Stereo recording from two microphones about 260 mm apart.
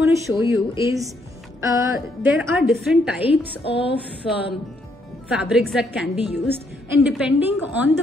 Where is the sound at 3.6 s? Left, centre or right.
Left.